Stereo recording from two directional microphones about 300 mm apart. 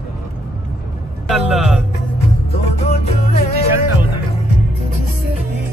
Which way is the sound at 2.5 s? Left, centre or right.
Left.